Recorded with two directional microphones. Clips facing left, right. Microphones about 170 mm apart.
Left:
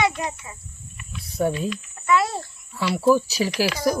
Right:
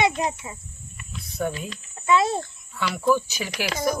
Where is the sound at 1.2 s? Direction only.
30° left (ahead or behind).